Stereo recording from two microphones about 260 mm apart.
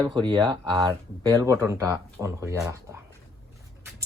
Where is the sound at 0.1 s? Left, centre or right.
Centre.